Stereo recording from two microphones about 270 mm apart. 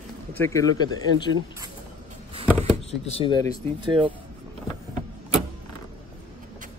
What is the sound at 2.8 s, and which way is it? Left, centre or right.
Speech, left.